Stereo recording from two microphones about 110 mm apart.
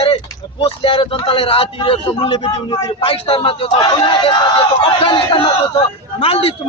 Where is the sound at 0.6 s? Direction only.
50° left (ahead or behind).